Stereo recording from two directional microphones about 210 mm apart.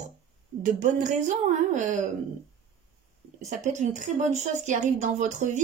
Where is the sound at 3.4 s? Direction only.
35° right (ahead or behind).